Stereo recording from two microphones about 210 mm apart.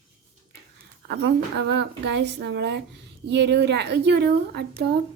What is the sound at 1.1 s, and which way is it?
A woman's voice, 55° right (ahead or behind).